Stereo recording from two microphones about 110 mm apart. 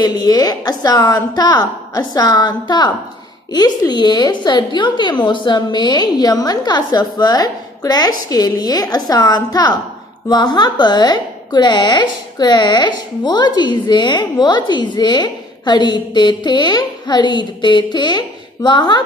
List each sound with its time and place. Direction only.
0.0 s a woman's voice: 35° left (ahead or behind)